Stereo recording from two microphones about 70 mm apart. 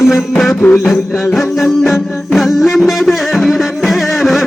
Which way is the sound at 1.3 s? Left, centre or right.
Centre.